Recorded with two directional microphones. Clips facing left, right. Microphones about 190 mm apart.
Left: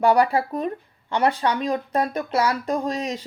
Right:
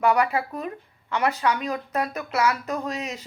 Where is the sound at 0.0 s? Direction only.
30° left (ahead or behind).